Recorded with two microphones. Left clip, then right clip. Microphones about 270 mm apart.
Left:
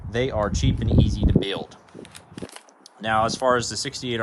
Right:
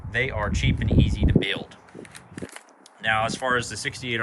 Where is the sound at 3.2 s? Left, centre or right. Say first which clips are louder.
Left 3 dB; centre.